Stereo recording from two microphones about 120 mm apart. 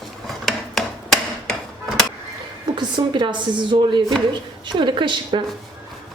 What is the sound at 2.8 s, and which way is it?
A woman's voice, 40° right (ahead or behind).